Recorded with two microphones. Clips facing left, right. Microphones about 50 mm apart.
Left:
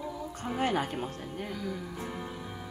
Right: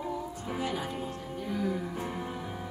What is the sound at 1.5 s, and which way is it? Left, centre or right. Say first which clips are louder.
Music: right 9 dB; centre.